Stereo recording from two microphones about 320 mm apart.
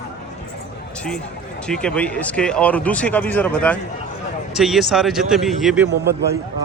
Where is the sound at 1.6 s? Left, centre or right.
Centre.